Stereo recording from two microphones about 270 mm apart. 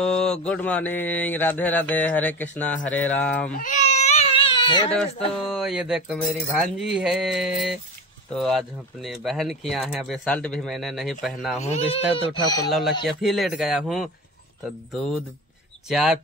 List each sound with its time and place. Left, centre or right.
0.0 s speech: centre
3.5 s baby cry: left
5.5 s speech: centre
11.6 s speech: left
12.6 s speech: centre